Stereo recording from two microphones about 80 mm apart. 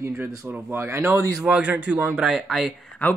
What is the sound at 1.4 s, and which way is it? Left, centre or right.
A man's voice, centre.